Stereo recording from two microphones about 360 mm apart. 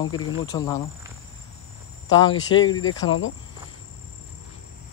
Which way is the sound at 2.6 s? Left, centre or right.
Left.